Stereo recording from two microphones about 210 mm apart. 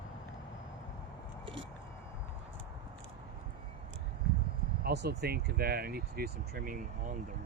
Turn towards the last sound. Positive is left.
turn(degrees=-45)  # may be behind; listen again after turning